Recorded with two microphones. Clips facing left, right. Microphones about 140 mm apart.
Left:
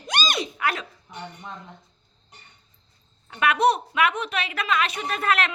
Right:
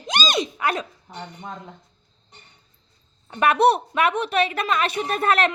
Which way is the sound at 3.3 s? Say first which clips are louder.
Right 3 dB; 35° right (ahead or behind).